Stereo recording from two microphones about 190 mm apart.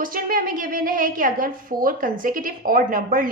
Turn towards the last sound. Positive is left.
turn(degrees=-45)  # may be behind; listen again after turning